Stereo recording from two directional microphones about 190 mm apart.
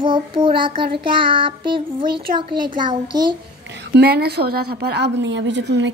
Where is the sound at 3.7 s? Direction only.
60° right (ahead or behind).